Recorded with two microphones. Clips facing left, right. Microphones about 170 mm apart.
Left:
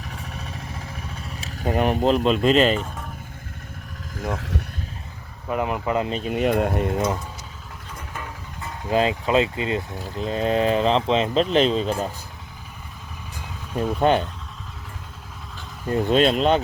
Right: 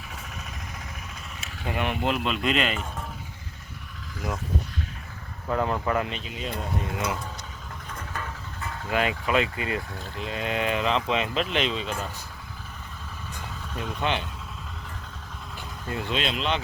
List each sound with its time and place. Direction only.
0.2 s vehicle: 35° left (ahead or behind)
5.5 s speech: 15° left (ahead or behind)
6.1 s speech: 40° left (ahead or behind)
6.3 s speech: 65° left (ahead or behind)
6.9 s speech: 40° left (ahead or behind)
8.1 s vehicle: 15° left (ahead or behind)
8.9 s speech: 30° left (ahead or behind)
13.7 s speech: 45° left (ahead or behind)
15.9 s speech: 40° left (ahead or behind)